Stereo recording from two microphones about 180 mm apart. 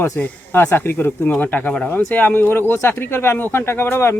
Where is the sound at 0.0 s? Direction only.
15° left (ahead or behind).